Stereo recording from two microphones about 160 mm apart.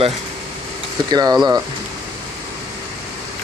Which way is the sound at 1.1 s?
25° right (ahead or behind).